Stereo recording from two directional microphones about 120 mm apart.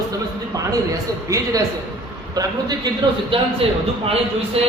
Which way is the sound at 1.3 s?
25° right (ahead or behind).